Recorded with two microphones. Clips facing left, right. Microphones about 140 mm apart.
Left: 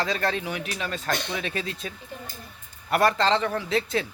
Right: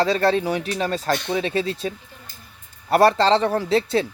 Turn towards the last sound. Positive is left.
turn(degrees=-35)  # may be behind; listen again after turning